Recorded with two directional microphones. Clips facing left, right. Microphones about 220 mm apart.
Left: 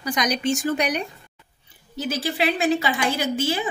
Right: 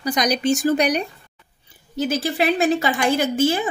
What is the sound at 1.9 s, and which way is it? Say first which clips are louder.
A woman's voice: right 4 dB; 50° right (ahead or behind).